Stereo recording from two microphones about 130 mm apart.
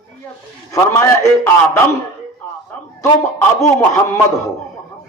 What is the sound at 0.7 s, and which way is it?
A man's voice, 20° left (ahead or behind).